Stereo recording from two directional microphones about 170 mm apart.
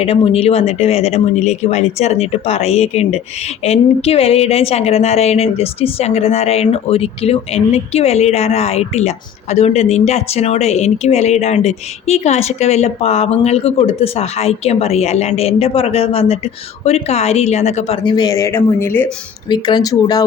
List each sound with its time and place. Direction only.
0.0 s a woman's voice: 35° left (ahead or behind); by 19.1 s 15° left (ahead or behind)
19.5 s speech: 25° left (ahead or behind)